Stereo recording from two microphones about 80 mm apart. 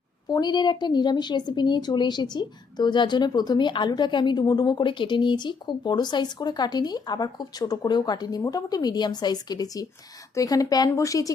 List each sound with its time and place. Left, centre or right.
0.3 s a woman's voice: left
10.8 s speech: left